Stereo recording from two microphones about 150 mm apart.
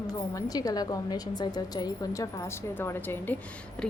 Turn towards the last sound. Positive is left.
turn(degrees=5)  # may be behind; listen again after turning